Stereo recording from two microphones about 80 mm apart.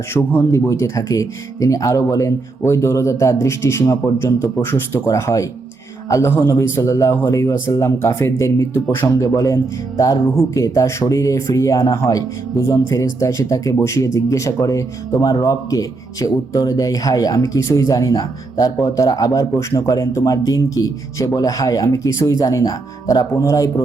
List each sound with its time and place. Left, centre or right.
0.2 s speech: left
0.5 s speech: left